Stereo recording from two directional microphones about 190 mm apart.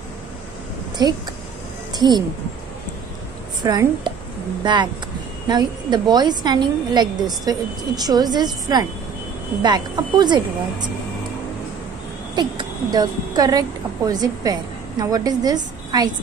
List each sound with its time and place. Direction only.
1.0 s a woman's voice: 20° right (ahead or behind)
3.6 s a woman's voice: 20° right (ahead or behind)
5.5 s a woman's voice: 20° right (ahead or behind)
12.4 s a woman's voice: 20° right (ahead or behind)